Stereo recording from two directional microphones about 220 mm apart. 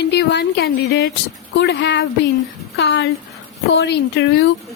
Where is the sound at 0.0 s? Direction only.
50° left (ahead or behind).